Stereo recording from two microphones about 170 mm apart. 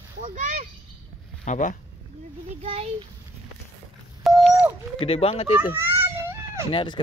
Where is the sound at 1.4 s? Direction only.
45° left (ahead or behind).